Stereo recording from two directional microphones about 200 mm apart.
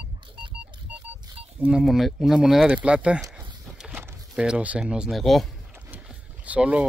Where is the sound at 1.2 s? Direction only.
25° right (ahead or behind).